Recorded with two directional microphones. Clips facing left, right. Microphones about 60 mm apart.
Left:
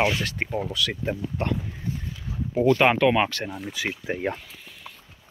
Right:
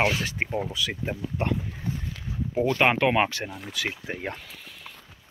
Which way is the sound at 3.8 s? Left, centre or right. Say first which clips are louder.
Left 1 dB; centre.